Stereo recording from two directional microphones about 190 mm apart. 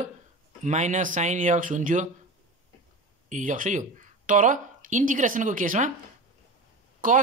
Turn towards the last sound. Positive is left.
turn(degrees=-45)  # may be behind; listen again after turning